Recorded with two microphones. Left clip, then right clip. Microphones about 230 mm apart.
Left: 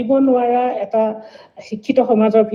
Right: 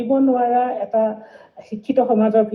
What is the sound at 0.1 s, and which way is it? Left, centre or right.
Speech, left.